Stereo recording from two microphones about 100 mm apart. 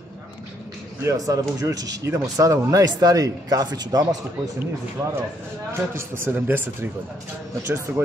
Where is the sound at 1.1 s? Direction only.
35° right (ahead or behind).